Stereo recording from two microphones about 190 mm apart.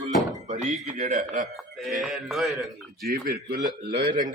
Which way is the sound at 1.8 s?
Centre (ahead or behind).